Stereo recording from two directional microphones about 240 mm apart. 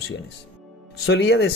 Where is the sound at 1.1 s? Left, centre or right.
Left.